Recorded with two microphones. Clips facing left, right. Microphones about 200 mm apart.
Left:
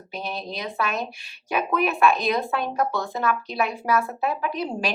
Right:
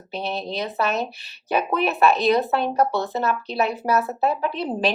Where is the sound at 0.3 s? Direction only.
30° right (ahead or behind).